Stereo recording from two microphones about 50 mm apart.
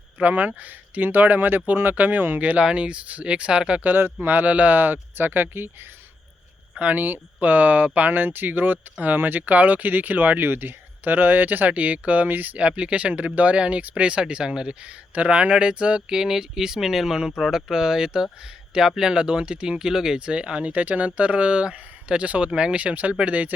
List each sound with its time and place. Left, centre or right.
0.2 s speech: right
2.4 s speech: right
3.9 s speech: right
6.7 s speech: right